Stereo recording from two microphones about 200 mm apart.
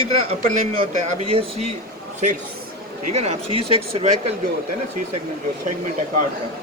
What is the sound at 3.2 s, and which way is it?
Speech, 30° right (ahead or behind).